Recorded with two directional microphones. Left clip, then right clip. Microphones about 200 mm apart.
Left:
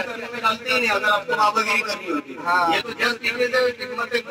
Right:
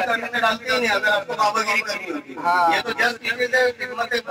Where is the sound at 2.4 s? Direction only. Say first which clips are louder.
Right 2 dB; 25° right (ahead or behind).